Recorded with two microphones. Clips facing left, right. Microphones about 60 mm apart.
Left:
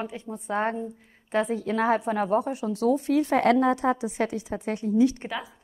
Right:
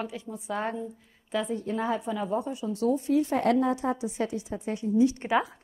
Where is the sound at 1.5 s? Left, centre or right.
Left.